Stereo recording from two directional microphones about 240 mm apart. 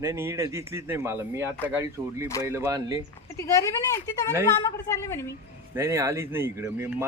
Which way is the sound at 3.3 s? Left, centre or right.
Centre.